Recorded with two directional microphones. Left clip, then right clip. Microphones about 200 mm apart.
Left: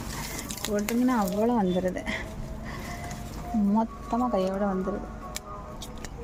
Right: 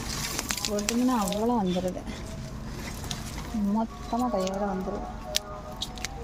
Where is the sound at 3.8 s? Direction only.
15° left (ahead or behind).